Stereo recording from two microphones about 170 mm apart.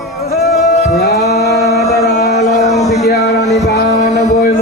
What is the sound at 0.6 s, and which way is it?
Music, 40° left (ahead or behind).